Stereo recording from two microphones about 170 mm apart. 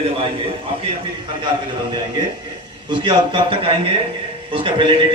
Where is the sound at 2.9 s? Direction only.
30° right (ahead or behind).